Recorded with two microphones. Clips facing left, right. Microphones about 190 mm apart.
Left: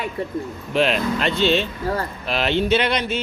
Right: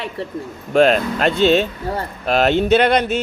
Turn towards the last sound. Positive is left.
turn(degrees=-45)  # may be behind; listen again after turning